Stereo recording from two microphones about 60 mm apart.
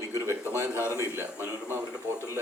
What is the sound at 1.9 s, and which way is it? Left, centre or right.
Speech, right.